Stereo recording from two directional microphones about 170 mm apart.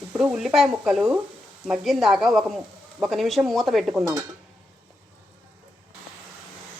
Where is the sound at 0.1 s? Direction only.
5° right (ahead or behind).